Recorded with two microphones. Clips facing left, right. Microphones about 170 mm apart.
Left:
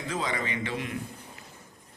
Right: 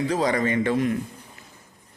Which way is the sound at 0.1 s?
40° right (ahead or behind).